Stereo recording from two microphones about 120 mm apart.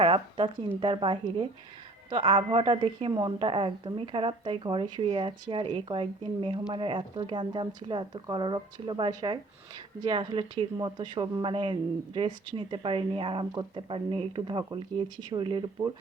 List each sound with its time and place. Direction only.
0.0 s speech: 45° right (ahead or behind)
3.1 s speech: 30° right (ahead or behind)
3.3 s speech: 50° right (ahead or behind)